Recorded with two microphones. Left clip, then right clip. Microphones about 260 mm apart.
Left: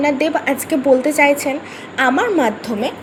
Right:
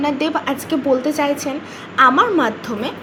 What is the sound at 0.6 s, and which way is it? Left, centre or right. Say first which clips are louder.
Speech: left 4 dB; left.